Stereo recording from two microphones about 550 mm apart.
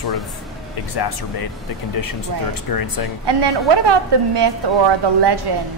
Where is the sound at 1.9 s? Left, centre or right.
Left.